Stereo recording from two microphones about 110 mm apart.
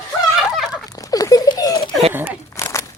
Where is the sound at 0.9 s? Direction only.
35° left (ahead or behind).